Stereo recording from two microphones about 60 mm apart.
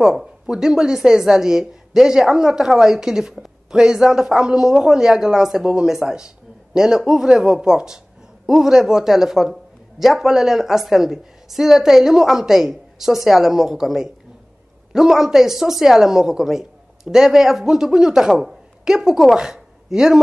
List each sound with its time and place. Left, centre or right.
0.0 s a man's voice: centre